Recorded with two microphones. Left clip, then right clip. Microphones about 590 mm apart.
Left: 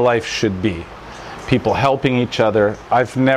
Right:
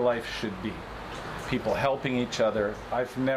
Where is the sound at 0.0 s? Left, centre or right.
Left.